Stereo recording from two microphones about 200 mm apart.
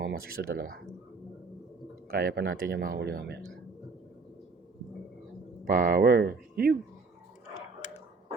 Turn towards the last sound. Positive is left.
turn(degrees=-50)  # may be behind; listen again after turning